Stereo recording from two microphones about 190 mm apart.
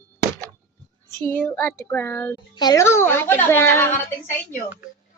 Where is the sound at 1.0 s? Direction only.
15° left (ahead or behind).